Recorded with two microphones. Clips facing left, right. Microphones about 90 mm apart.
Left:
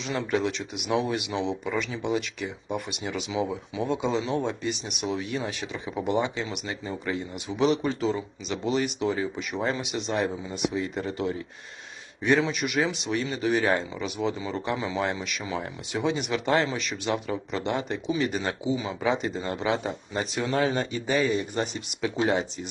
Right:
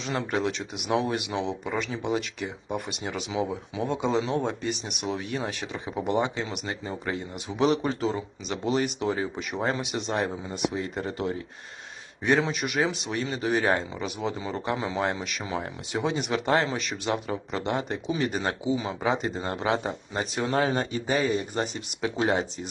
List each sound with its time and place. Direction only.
0.0 s a man's voice: 40° right (ahead or behind)